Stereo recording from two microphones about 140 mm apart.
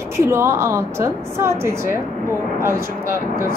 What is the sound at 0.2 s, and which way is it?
Speech, 20° right (ahead or behind).